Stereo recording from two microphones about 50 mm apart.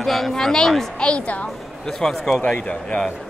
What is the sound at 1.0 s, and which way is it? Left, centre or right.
Speech, left.